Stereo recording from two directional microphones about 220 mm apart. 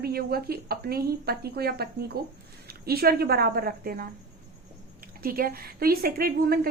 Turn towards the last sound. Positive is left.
turn(degrees=-45)  # may be behind; listen again after turning